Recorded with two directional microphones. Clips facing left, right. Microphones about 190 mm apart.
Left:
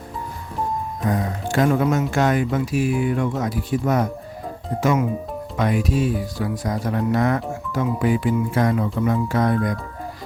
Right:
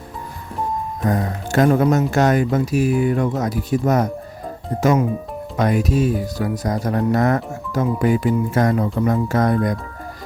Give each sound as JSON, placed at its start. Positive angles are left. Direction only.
{"t": 1.0, "sound": "speech", "side_deg": -45}